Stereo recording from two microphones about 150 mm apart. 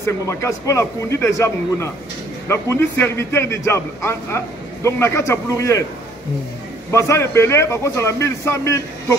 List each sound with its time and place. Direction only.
0.0 s a man's voice: 20° left (ahead or behind)
6.9 s a man's voice: 20° left (ahead or behind)